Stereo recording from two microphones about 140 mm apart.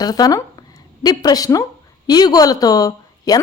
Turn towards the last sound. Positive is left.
turn(degrees=25)  # may be behind; listen again after turning